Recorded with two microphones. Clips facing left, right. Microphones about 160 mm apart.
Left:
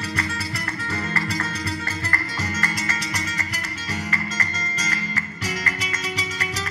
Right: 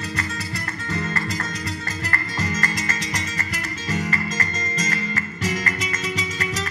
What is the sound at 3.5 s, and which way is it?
Music, 35° left (ahead or behind).